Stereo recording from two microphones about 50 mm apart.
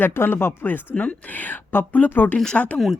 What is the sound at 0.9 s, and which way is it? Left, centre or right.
Speech, left.